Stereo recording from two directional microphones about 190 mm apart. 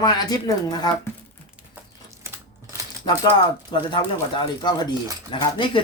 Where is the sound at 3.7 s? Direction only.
25° left (ahead or behind).